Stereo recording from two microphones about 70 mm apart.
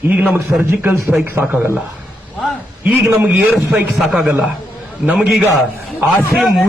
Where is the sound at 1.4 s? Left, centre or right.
Centre.